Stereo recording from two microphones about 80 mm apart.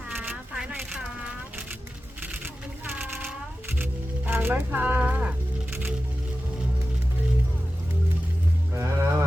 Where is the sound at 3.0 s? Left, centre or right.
Right.